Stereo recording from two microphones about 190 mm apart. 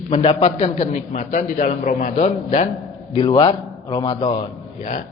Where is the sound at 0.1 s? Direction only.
30° left (ahead or behind).